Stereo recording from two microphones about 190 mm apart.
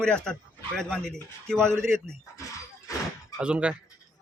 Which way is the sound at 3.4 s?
5° right (ahead or behind).